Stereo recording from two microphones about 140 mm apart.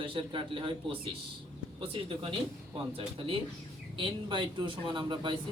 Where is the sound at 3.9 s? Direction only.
35° right (ahead or behind).